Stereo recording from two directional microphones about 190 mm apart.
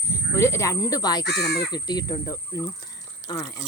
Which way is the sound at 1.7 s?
20° left (ahead or behind).